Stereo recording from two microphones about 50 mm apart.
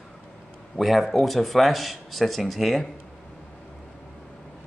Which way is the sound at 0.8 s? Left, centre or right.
Centre.